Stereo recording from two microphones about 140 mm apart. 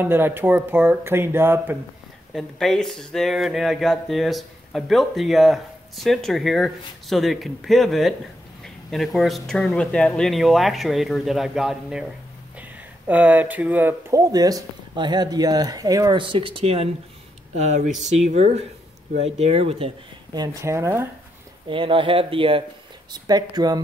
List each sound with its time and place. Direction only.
0.0 s speech: 15° right (ahead or behind)
2.3 s speech: 5° left (ahead or behind); by 14.2 s 15° right (ahead or behind)
14.3 s speech: 25° right (ahead or behind)
16.2 s speech: 35° right (ahead or behind)
17.6 s speech: 60° right (ahead or behind); by 19.9 s 45° right (ahead or behind)
20.3 s speech: 20° right (ahead or behind)
21.6 s speech: 35° right (ahead or behind)
23.1 s speech: 30° right (ahead or behind)